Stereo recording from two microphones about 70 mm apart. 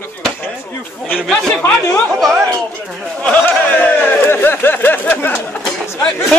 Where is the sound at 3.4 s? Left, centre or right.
Left.